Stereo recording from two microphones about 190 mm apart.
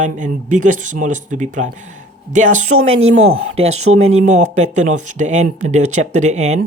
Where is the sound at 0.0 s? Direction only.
40° right (ahead or behind).